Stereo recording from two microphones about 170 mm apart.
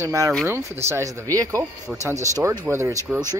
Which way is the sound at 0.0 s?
20° right (ahead or behind).